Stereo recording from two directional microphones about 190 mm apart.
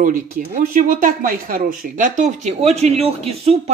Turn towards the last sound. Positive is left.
turn(degrees=-30)  # may be behind; listen again after turning